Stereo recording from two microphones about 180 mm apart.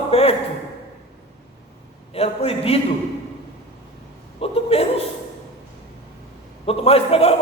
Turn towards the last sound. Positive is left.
turn(degrees=35)  # may be behind; listen again after turning